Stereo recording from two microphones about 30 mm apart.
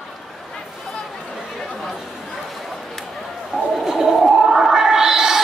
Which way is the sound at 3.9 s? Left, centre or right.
Centre.